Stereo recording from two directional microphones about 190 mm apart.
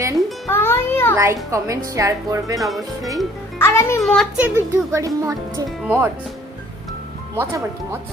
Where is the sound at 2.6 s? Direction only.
Centre (ahead or behind).